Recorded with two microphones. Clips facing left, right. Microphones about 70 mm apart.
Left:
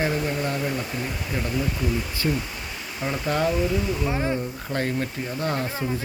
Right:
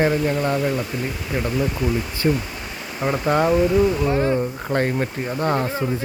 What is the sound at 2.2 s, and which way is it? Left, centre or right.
Speech, right.